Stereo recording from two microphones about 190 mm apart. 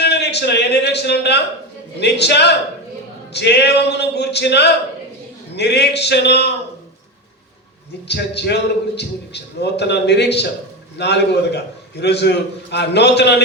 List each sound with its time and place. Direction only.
0.0 s a man's voice: 60° left (ahead or behind)
8.0 s a man's voice: 60° left (ahead or behind)